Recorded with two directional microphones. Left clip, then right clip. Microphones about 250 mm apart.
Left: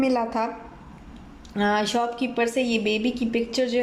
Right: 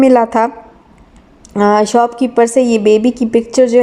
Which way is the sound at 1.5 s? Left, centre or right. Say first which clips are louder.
Right 13 dB; right.